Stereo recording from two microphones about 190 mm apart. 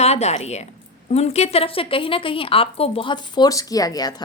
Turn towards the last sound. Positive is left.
turn(degrees=20)  # may be behind; listen again after turning